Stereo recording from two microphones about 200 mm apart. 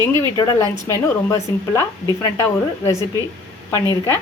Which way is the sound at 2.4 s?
15° left (ahead or behind).